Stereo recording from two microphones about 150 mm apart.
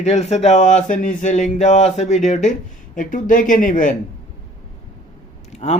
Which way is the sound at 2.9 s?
65° left (ahead or behind).